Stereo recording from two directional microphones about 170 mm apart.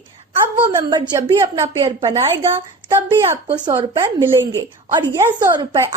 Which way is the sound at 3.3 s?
30° right (ahead or behind).